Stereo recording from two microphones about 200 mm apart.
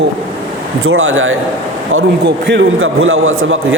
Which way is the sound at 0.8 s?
90° right.